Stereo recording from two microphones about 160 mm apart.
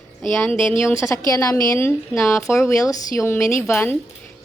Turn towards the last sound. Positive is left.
turn(degrees=15)  # may be behind; listen again after turning